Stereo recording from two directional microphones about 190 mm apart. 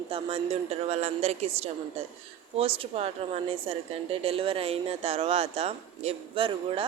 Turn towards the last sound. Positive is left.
turn(degrees=-25)  # may be behind; listen again after turning